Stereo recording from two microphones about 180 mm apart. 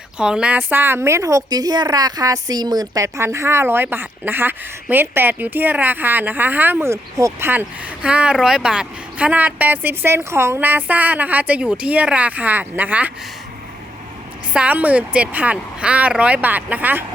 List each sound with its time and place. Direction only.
0.2 s a woman's voice: 5° right (ahead or behind)
14.5 s a woman's voice: 10° right (ahead or behind)